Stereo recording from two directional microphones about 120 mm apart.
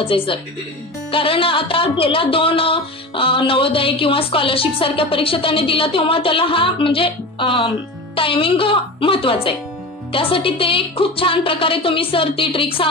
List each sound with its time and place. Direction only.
0.0 s speech: 50° left (ahead or behind)